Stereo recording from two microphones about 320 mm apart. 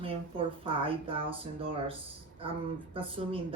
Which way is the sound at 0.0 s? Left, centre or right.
Centre.